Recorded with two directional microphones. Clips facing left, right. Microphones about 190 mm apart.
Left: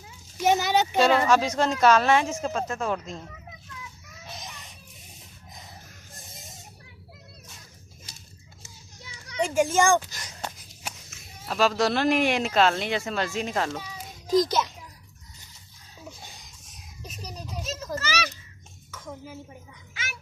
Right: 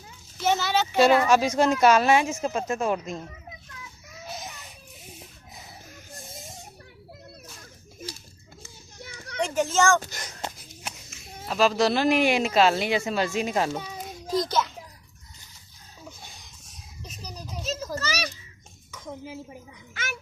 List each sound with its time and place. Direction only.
0.3 s a sound: 15° left (ahead or behind)
0.9 s speech: 10° right (ahead or behind)
6.1 s snake: centre (ahead or behind)
8.6 s children playing: 55° right (ahead or behind)
9.4 s a child's voice: 10° left (ahead or behind)
10.0 s a child's voice: 55° right (ahead or behind)
11.4 s speech: centre (ahead or behind)
14.3 s a child's voice: 15° left (ahead or behind)
17.0 s a sound: centre (ahead or behind)
17.9 s a sound: 35° right (ahead or behind)
18.9 s dishes: 15° right (ahead or behind)
19.9 s a sound: 50° right (ahead or behind)